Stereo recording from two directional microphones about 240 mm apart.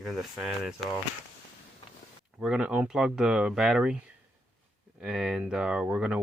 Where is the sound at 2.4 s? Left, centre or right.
Centre.